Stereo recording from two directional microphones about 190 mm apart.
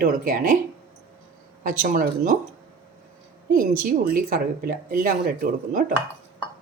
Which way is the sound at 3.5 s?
50° right (ahead or behind).